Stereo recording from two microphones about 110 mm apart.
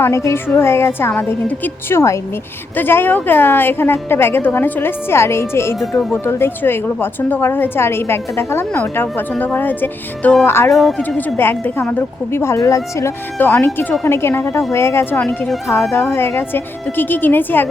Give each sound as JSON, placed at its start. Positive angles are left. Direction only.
{"t": 0.0, "sound": "a woman's voice", "side_deg": 25}
{"t": 10.7, "sound": "speech", "side_deg": 0}
{"t": 11.3, "sound": "a woman's voice", "side_deg": 20}
{"t": 15.2, "sound": "speech", "side_deg": 10}
{"t": 16.0, "sound": "a woman's voice", "side_deg": 20}